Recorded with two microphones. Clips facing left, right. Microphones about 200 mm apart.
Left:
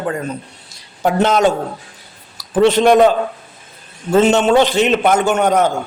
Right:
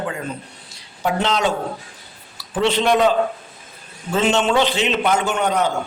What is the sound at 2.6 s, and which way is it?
Speech, 45° left (ahead or behind).